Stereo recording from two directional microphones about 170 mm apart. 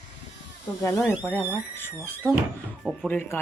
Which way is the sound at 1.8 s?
15° left (ahead or behind).